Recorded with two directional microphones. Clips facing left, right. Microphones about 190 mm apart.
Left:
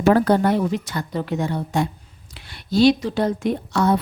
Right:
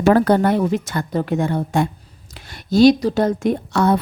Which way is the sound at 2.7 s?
40° right (ahead or behind).